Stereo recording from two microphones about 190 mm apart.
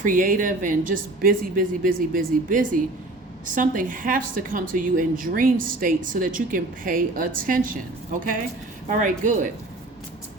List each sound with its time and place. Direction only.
0.0 s a woman's voice: 45° right (ahead or behind)
8.9 s speech: 40° right (ahead or behind)